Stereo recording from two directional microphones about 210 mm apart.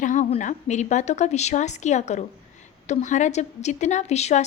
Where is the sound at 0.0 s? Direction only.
35° left (ahead or behind).